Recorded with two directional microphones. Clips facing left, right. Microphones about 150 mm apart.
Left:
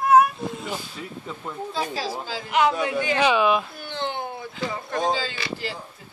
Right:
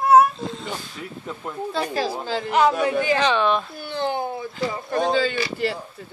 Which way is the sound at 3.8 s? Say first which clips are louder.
Right 4 dB; 40° right (ahead or behind).